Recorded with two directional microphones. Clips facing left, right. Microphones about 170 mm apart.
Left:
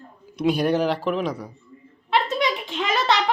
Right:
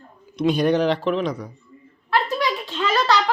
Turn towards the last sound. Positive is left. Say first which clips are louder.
# right 2 dB
turn(degrees=20)  # may be behind; listen again after turning